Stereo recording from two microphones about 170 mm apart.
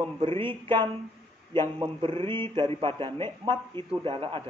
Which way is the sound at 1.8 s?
30° right (ahead or behind).